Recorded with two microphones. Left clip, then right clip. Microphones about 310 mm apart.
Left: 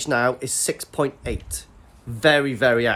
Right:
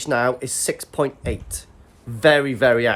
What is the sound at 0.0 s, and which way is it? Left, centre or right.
Speech, centre.